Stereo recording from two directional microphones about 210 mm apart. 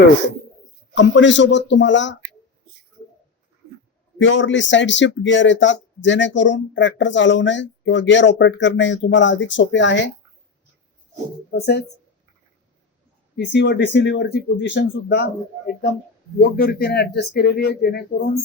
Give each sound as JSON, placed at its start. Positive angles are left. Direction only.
{"t": 0.9, "sound": "a man's voice", "side_deg": 60}
{"t": 4.2, "sound": "a man's voice", "side_deg": 60}
{"t": 11.5, "sound": "speech", "side_deg": 50}
{"t": 13.3, "sound": "a man's voice", "side_deg": 55}